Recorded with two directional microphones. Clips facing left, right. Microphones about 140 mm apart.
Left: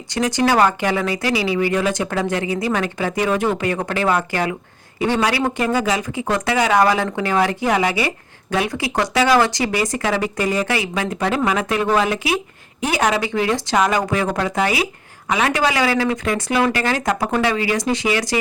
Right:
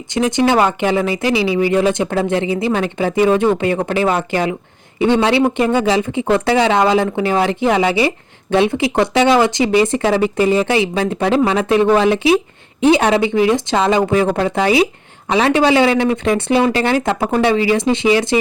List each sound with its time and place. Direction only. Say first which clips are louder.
0.1 s speech: right 3 dB; 20° right (ahead or behind)